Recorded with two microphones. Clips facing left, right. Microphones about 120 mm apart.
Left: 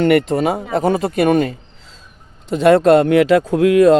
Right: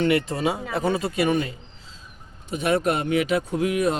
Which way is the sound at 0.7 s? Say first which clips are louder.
Left 7 dB; 45° left (ahead or behind).